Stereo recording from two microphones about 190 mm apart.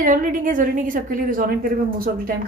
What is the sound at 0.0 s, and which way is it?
A woman's voice, 45° right (ahead or behind).